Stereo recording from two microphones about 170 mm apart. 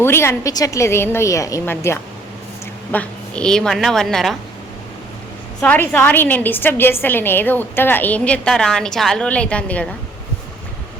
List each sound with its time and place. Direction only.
0.0 s a woman's voice: 15° left (ahead or behind)
5.6 s a woman's voice: 10° left (ahead or behind)